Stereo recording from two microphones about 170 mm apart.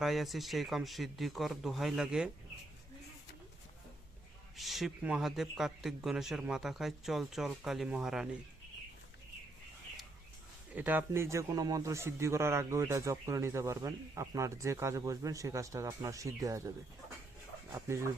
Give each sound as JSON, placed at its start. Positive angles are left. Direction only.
{"t": 0.0, "sound": "speech", "side_deg": 0}
{"t": 4.5, "sound": "speech", "side_deg": 0}
{"t": 10.8, "sound": "a man's voice", "side_deg": -10}